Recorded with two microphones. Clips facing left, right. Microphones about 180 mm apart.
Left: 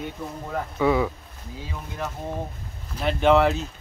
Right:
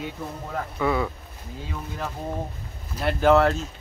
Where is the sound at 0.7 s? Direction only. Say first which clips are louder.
Left 3 dB; 10° left (ahead or behind).